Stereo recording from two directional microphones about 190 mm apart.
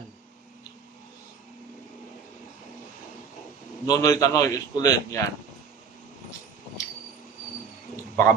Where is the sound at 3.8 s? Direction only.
20° left (ahead or behind).